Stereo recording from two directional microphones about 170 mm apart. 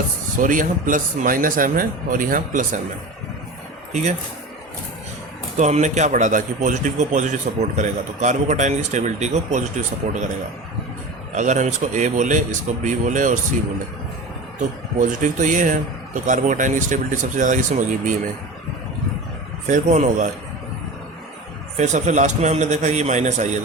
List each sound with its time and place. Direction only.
0.4 s a man's voice: 50° right (ahead or behind)
5.5 s a man's voice: 45° right (ahead or behind)
11.3 s a man's voice: 45° right (ahead or behind)
14.9 s a man's voice: 50° right (ahead or behind)
19.6 s a man's voice: 45° right (ahead or behind)
21.8 s a man's voice: 45° right (ahead or behind)